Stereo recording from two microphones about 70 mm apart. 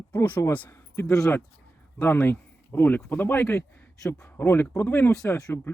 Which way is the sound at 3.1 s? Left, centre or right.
Left.